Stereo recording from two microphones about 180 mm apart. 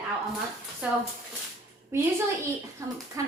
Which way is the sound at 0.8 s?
5° right (ahead or behind).